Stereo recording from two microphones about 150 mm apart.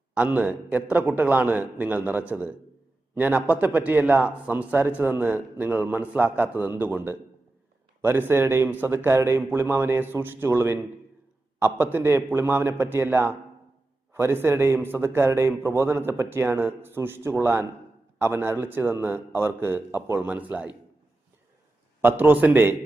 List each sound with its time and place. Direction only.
0.1 s a man's voice: 10° right (ahead or behind)
22.0 s a man's voice: 10° right (ahead or behind)